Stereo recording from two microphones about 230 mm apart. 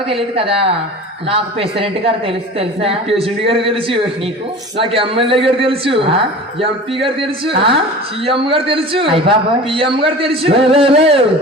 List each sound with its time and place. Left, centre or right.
0.1 s a man's voice: right